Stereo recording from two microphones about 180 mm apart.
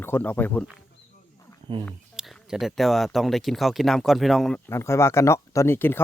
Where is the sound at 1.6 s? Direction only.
25° right (ahead or behind).